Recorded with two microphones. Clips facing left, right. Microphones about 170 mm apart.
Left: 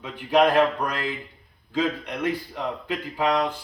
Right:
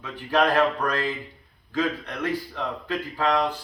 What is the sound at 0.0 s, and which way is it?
A man's voice, 15° left (ahead or behind).